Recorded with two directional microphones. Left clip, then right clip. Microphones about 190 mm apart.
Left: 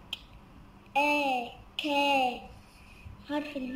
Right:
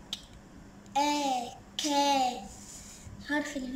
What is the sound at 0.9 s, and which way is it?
Babbling, 5° right (ahead or behind).